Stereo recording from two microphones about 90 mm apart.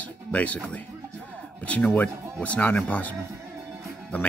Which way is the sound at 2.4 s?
15° left (ahead or behind).